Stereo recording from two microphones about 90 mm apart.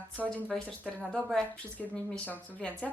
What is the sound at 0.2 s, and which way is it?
A woman's voice, 20° left (ahead or behind).